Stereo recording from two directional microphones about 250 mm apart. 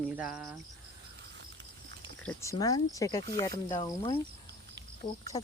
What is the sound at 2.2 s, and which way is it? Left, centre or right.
Speech, centre.